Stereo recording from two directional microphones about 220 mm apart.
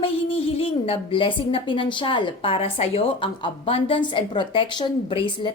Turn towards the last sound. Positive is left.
turn(degrees=20)  # may be behind; listen again after turning